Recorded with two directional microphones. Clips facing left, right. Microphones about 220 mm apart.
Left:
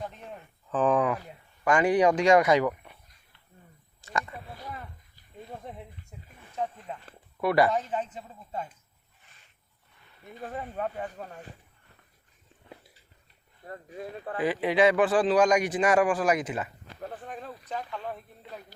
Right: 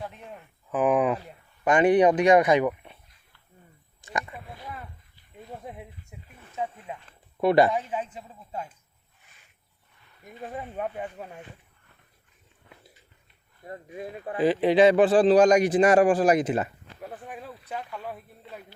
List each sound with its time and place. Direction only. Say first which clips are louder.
0.7 s speech: right 2 dB; 10° right (ahead or behind)
4.0 s speech: even; 15° right (ahead or behind)
5.6 s a sound: right 2 dB; 10° right (ahead or behind)
6.6 s speech: even; 10° right (ahead or behind)
7.4 s speech: right 4 dB; 25° right (ahead or behind)
7.7 s speech: even; 10° right (ahead or behind)
10.4 s speech: right 1 dB; 10° right (ahead or behind)
13.7 s speech: right 2 dB; 15° right (ahead or behind)
14.3 s a man's voice: right 5 dB; 30° right (ahead or behind)
17.0 s speech: even; 5° right (ahead or behind)